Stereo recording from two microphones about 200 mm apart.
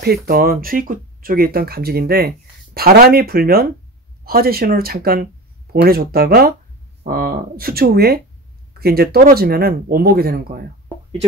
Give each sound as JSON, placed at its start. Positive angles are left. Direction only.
{"t": 0.0, "sound": "speech", "side_deg": -50}